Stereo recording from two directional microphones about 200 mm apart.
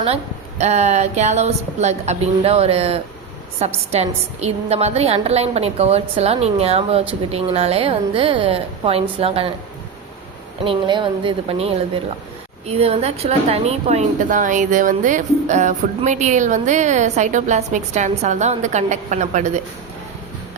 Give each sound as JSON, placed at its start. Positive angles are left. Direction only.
{"t": 0.6, "sound": "a woman's voice", "side_deg": -35}
{"t": 10.6, "sound": "a woman's voice", "side_deg": -25}